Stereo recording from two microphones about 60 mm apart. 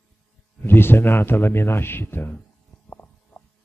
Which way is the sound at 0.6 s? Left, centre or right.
Left.